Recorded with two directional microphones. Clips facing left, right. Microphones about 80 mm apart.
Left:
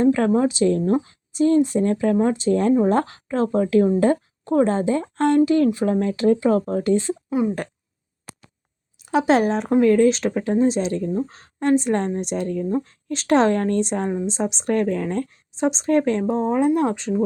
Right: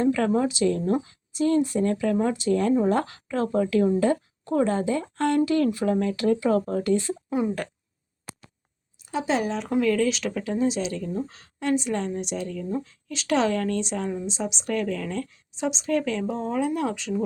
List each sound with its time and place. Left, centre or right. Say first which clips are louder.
0.0 s a woman's voice: left 5 dB; left
7.3 s a woman's voice: left 3 dB; centre
9.0 s speech: left 8 dB; left
9.5 s a woman's voice: left 6 dB; left
11.0 s speech: left 6 dB; left
11.3 s a woman's voice: left 6 dB; left